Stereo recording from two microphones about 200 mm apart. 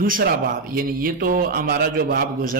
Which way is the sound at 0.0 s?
45° right (ahead or behind).